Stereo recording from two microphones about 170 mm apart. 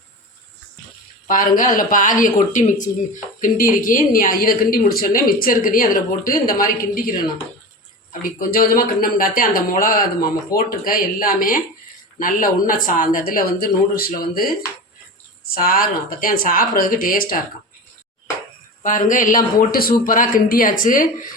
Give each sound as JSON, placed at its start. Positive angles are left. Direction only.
{"t": 1.3, "sound": "speech", "side_deg": 55}
{"t": 8.2, "sound": "speech", "side_deg": 55}
{"t": 10.5, "sound": "speech", "side_deg": 20}
{"t": 10.8, "sound": "speech", "side_deg": 55}
{"t": 15.4, "sound": "speech", "side_deg": 60}
{"t": 18.8, "sound": "speech", "side_deg": 50}